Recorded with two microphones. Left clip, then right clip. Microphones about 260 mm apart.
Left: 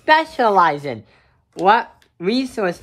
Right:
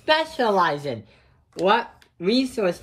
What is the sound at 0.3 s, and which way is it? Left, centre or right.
A woman's voice, centre.